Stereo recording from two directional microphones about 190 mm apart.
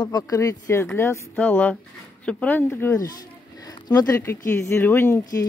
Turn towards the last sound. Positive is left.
turn(degrees=15)  # may be behind; listen again after turning